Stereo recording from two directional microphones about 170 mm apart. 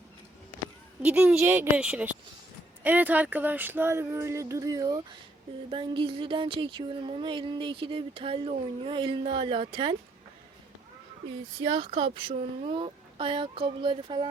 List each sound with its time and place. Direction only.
1.0 s speech: 5° right (ahead or behind); by 5.0 s 25° right (ahead or behind)
5.7 s a sound: 30° right (ahead or behind)
11.6 s speech: 30° right (ahead or behind)